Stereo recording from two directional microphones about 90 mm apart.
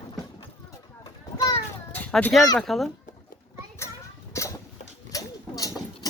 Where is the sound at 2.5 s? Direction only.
Centre (ahead or behind).